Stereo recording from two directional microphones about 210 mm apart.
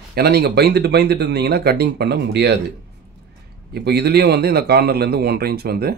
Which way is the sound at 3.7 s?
50° right (ahead or behind).